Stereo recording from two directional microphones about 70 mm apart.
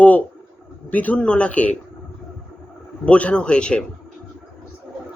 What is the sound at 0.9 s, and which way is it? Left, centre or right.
Speech, left.